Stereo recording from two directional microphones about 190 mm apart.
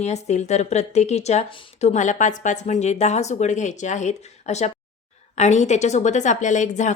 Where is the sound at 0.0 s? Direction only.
35° left (ahead or behind).